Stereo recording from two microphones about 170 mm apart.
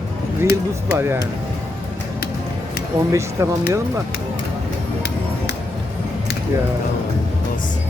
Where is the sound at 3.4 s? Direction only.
15° right (ahead or behind).